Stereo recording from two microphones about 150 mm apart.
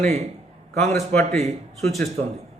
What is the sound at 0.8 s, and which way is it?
Speech, 20° left (ahead or behind).